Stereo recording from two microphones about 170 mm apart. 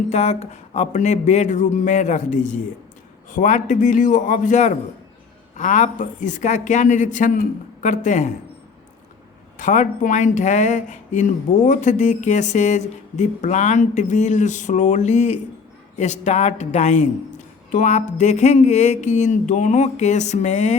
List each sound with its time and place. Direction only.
0.1 s speech: 40° left (ahead or behind)
9.6 s speech: 50° left (ahead or behind)